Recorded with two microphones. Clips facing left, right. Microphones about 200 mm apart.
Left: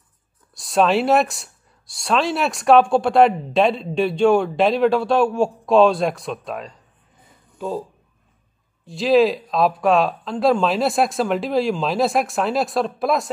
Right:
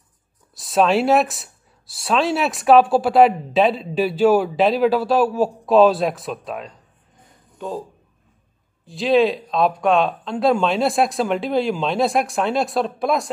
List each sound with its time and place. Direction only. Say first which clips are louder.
0.6 s speech: even; centre (ahead or behind)
8.8 s speech: left 1 dB; centre (ahead or behind)